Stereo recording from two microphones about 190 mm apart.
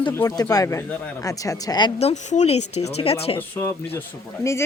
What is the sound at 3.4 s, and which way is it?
Speech, 10° left (ahead or behind).